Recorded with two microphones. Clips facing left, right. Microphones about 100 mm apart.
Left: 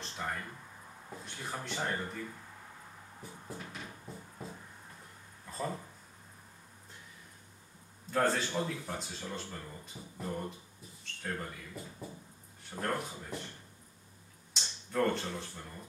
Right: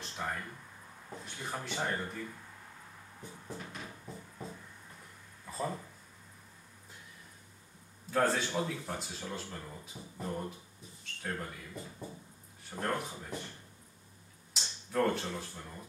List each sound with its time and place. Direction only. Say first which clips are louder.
0.0 s a sound: even; 5° right (ahead or behind)
1.1 s speech: right 1 dB; centre (ahead or behind)
3.2 s music: right 1 dB; centre (ahead or behind)
8.1 s speech: even; centre (ahead or behind)
14.5 s speech: right 1 dB; centre (ahead or behind)